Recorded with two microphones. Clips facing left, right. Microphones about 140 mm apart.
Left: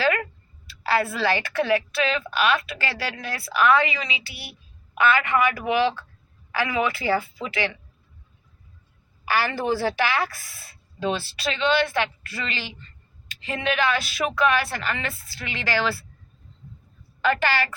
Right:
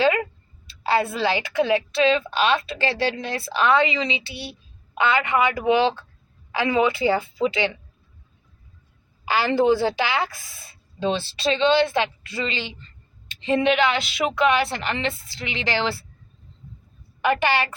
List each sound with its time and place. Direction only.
0.0 s a sound: 20° right (ahead or behind)
0.7 s a woman's voice: 20° right (ahead or behind)
9.2 s a woman's voice: 20° right (ahead or behind)
17.2 s a woman's voice: 20° right (ahead or behind)